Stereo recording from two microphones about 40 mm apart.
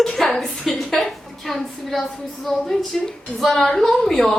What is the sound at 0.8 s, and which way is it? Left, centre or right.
A woman's voice, centre.